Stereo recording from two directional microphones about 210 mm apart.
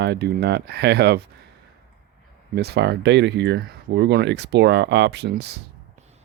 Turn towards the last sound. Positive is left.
turn(degrees=-50)  # may be behind; listen again after turning